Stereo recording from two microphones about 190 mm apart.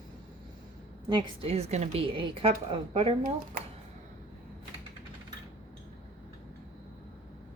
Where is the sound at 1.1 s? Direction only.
30° right (ahead or behind).